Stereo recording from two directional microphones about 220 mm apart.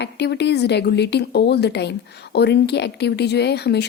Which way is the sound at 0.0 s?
50° left (ahead or behind).